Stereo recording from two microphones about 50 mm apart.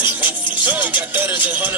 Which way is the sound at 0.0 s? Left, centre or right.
Right.